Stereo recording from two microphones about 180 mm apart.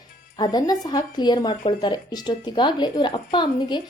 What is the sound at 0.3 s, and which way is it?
Speech, 25° left (ahead or behind).